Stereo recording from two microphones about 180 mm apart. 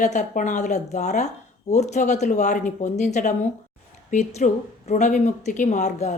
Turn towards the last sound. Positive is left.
turn(degrees=40)  # may be behind; listen again after turning